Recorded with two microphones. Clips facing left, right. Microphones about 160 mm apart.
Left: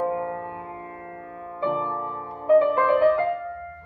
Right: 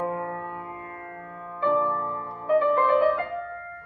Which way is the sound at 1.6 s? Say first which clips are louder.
Right 2 dB; 15° left (ahead or behind).